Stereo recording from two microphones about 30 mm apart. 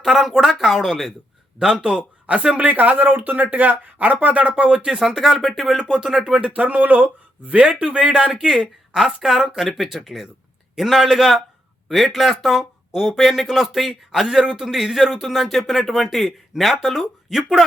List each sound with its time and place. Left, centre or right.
0.1 s speech: centre
1.8 s speech: right
2.6 s speech: right
4.6 s speech: right
4.9 s speech: centre
5.9 s speech: centre
6.4 s speech: right
7.6 s speech: right
9.0 s speech: centre
16.9 s speech: centre